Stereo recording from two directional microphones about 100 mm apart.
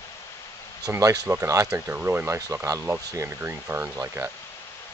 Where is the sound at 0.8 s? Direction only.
35° right (ahead or behind).